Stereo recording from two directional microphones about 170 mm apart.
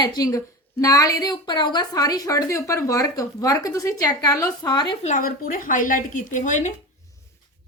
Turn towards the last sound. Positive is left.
turn(degrees=45)  # may be behind; listen again after turning